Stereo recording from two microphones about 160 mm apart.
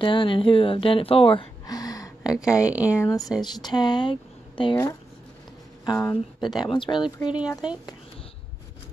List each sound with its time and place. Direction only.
0.0 s a woman's voice: 30° left (ahead or behind)
2.7 s speech: 10° right (ahead or behind)
3.5 s speech: 25° left (ahead or behind)
5.9 s speech: 25° left (ahead or behind)